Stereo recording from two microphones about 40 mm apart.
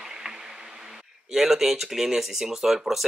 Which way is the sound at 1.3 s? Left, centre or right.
Centre.